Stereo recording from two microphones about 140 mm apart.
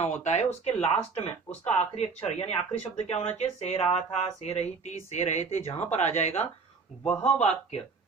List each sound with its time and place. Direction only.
0.0 s speech: 55° left (ahead or behind)
7.0 s speech: 10° left (ahead or behind)
7.3 s speech: 50° left (ahead or behind)